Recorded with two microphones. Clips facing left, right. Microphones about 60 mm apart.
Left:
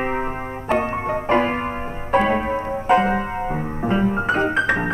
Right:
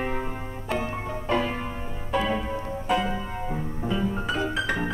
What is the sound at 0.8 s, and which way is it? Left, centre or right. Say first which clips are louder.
Piano: left 8 dB; left.